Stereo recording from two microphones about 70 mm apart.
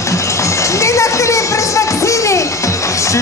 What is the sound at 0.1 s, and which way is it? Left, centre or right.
Run, left.